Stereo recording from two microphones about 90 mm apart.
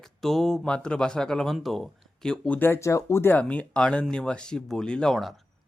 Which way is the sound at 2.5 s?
20° left (ahead or behind).